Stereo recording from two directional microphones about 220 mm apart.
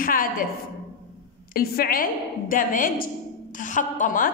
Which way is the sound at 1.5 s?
45° left (ahead or behind).